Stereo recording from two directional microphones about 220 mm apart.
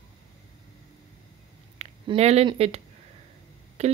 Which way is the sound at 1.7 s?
25° right (ahead or behind).